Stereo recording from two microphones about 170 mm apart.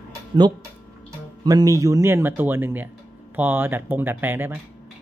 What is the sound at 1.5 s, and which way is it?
Speech, 20° right (ahead or behind).